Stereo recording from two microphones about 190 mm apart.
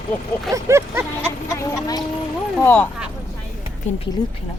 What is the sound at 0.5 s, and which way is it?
Speech, 15° right (ahead or behind).